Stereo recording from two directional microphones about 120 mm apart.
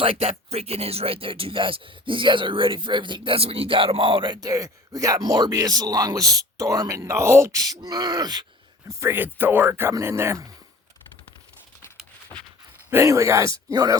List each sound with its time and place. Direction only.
0.0 s speech: 55° right (ahead or behind); by 8.4 s 35° right (ahead or behind)
8.9 s speech: 20° right (ahead or behind)
12.9 s speech: 25° right (ahead or behind)